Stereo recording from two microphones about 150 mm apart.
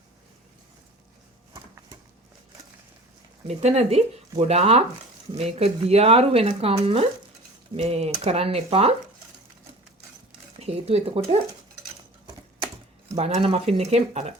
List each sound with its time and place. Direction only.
3.4 s speech: 45° right (ahead or behind)
10.6 s speech: 45° right (ahead or behind)
13.1 s speech: 40° right (ahead or behind)